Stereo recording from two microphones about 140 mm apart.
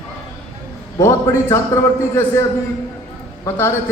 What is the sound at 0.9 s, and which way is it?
A man's voice, 20° left (ahead or behind).